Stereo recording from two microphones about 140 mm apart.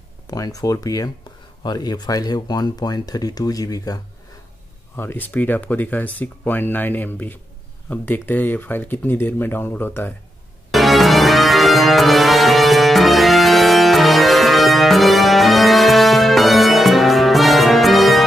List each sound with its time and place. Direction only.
0.3 s speech: 25° left (ahead or behind)
4.9 s speech: 15° left (ahead or behind)
10.7 s music: centre (ahead or behind)